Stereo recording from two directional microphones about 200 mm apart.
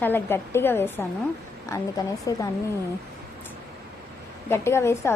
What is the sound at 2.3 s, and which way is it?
Speech, 15° left (ahead or behind).